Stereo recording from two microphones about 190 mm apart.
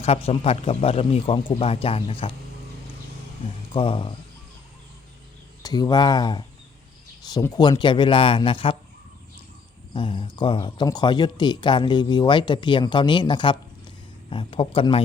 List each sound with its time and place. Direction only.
0.0 s speech: 30° left (ahead or behind)
3.7 s speech: 25° left (ahead or behind)
5.6 s speech: 20° left (ahead or behind)
9.9 s speech: 25° left (ahead or behind)